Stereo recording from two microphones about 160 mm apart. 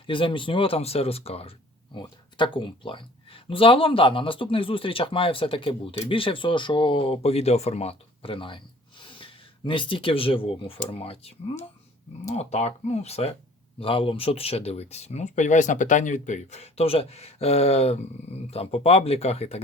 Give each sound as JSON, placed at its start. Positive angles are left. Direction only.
{"t": 0.1, "sound": "speech", "side_deg": 30}